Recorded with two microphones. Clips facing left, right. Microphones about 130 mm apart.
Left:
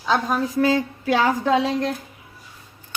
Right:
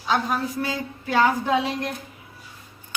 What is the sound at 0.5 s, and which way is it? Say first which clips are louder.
Dishes: left 9 dB; 90° left.